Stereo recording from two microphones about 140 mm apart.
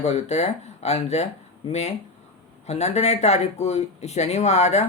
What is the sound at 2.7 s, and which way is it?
Speech, 50° left (ahead or behind).